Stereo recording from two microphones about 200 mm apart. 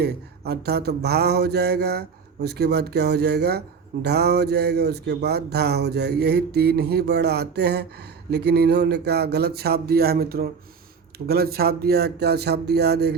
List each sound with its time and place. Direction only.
0.0 s mantra: 55° right (ahead or behind)
4.0 s speech: 55° right (ahead or behind)